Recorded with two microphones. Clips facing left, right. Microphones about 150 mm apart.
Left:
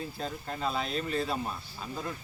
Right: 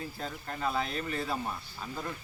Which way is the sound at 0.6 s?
20° left (ahead or behind).